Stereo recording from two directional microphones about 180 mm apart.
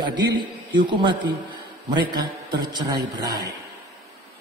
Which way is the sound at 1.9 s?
25° right (ahead or behind).